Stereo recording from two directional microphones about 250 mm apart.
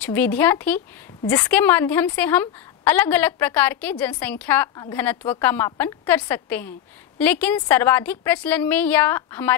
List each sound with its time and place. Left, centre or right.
0.0 s speech: centre